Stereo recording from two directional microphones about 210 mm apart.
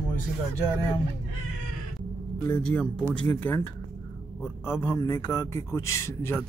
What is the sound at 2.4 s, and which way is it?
A man's voice, 5° left (ahead or behind).